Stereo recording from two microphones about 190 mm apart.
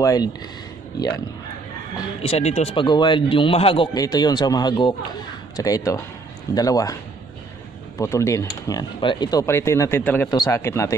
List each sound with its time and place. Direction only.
0.0 s a man's voice: 20° left (ahead or behind)
2.2 s a man's voice: 35° left (ahead or behind); by 7.0 s 20° left (ahead or behind)
8.0 s speech: 15° left (ahead or behind)